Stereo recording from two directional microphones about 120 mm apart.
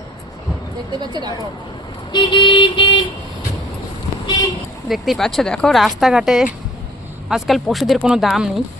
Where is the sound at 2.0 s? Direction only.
40° left (ahead or behind).